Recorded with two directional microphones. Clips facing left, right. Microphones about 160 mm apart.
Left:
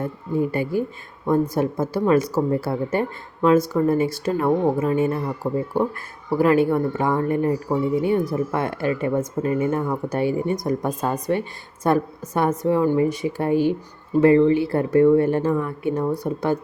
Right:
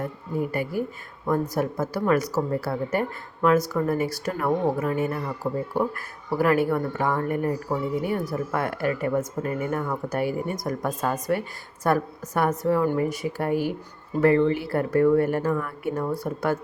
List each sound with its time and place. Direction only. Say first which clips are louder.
0.5 s speech: left 4 dB; 25° left (ahead or behind)